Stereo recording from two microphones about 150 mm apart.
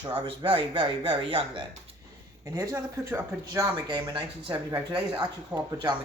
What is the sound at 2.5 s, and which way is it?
Speech, 20° right (ahead or behind).